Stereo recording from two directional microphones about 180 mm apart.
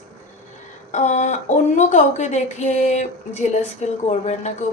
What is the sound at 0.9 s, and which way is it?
A woman's voice, 40° left (ahead or behind).